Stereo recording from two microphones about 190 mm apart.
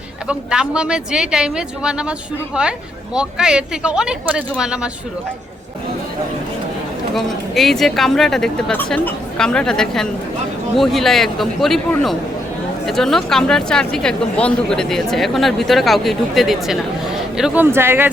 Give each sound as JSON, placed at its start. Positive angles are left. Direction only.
{"t": 0.3, "sound": "speech", "side_deg": -5}
{"t": 3.2, "sound": "speech", "side_deg": -5}
{"t": 7.1, "sound": "speech", "side_deg": 0}